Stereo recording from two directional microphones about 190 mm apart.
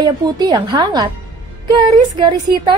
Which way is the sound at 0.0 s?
20° right (ahead or behind).